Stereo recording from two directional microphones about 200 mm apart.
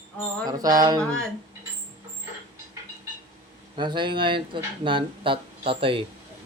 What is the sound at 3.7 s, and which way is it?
Speech, 25° right (ahead or behind).